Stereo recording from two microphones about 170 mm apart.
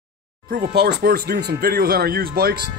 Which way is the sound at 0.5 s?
65° right (ahead or behind).